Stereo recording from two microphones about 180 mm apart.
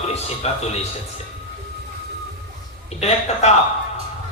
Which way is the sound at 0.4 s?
35° left (ahead or behind).